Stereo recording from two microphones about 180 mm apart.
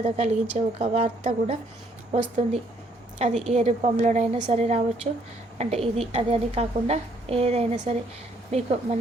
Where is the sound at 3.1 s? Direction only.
40° right (ahead or behind).